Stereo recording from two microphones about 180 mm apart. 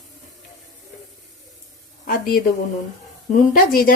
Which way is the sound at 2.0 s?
55° left (ahead or behind).